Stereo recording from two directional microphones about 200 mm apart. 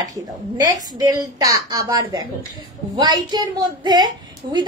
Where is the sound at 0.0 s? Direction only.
15° right (ahead or behind).